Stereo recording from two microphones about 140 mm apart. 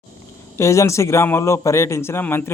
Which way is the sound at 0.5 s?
20° left (ahead or behind).